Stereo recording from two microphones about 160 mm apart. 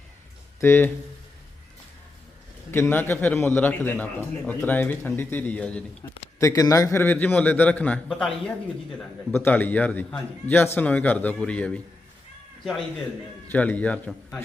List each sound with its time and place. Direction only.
0.6 s a man's voice: 15° left (ahead or behind)
2.7 s a man's voice: 15° left (ahead or behind)
6.4 s a man's voice: 20° left (ahead or behind)
13.5 s a man's voice: 10° left (ahead or behind)